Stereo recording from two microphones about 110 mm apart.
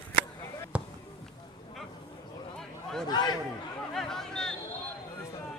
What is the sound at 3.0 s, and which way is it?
Speech, 40° left (ahead or behind).